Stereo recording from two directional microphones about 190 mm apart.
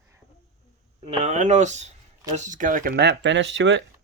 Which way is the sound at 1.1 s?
35° right (ahead or behind).